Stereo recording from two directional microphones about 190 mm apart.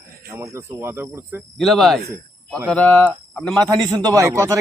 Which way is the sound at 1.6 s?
Centre (ahead or behind).